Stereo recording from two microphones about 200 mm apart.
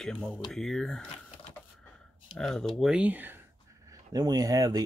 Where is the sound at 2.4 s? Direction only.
Centre (ahead or behind).